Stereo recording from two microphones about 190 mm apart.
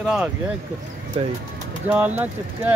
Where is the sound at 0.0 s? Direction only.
Centre (ahead or behind).